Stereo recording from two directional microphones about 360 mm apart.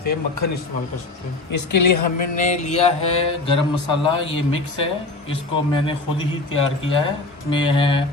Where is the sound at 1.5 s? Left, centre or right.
Left.